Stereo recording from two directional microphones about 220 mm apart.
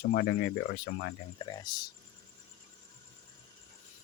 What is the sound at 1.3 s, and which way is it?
Speech, 20° left (ahead or behind).